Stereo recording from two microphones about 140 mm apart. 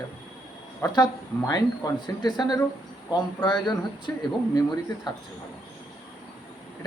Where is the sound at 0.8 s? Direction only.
20° left (ahead or behind).